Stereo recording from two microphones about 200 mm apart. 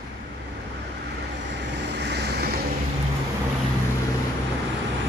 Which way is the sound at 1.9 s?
55° right (ahead or behind).